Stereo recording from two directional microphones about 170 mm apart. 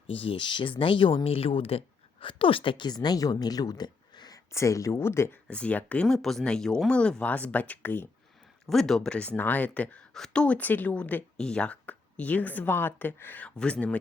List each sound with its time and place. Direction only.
0.1 s a woman's voice: 35° left (ahead or behind); by 14.0 s 5° left (ahead or behind)